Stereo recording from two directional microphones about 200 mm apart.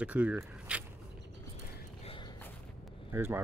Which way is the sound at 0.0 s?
5° right (ahead or behind).